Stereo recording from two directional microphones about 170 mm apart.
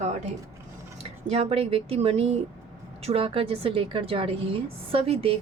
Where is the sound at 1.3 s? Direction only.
35° right (ahead or behind).